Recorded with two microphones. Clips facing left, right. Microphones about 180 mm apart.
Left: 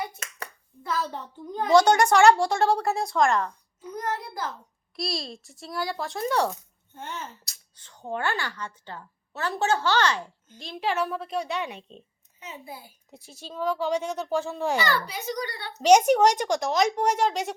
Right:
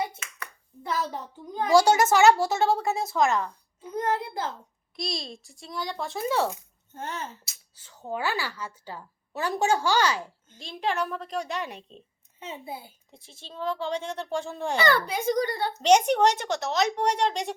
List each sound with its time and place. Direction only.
0.2 s hands: 40° left (ahead or behind)
1.5 s speech: 10° right (ahead or behind)
3.8 s a child's voice: 25° right (ahead or behind)
4.9 s speech: centre (ahead or behind)
6.9 s speech: 40° right (ahead or behind)
7.4 s speech: 5° right (ahead or behind)
12.4 s a child's voice: 25° right (ahead or behind)
13.6 s a woman's voice: 10° left (ahead or behind)
14.8 s a child's voice: 55° right (ahead or behind)
15.8 s a woman's voice: 10° left (ahead or behind)